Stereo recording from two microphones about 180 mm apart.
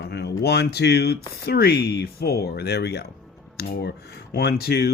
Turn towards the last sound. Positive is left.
turn(degrees=60)  # may be behind; listen again after turning